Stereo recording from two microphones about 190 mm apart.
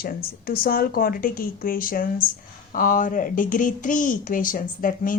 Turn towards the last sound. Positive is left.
turn(degrees=45)  # may be behind; listen again after turning